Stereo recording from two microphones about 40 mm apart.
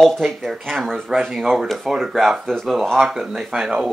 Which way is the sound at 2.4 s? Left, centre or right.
Centre.